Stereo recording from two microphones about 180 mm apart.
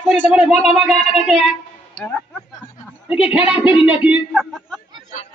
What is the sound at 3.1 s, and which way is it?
Speech, 5° right (ahead or behind).